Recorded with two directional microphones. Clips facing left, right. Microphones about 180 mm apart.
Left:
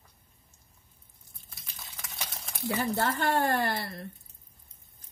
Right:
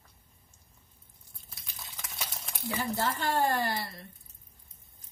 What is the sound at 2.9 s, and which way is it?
Speech, 65° left (ahead or behind).